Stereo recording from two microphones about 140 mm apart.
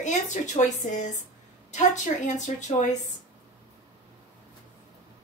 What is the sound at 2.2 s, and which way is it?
Speech, 60° left (ahead or behind).